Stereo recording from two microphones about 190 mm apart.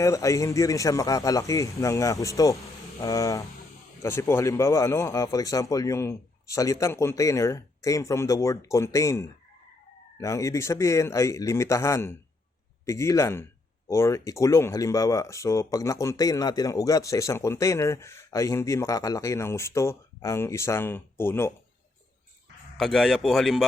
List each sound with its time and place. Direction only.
0.0 s speech: 15° left (ahead or behind)
22.8 s a man's voice: centre (ahead or behind)